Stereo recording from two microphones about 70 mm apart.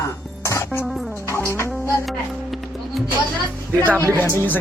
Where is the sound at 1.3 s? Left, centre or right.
Left.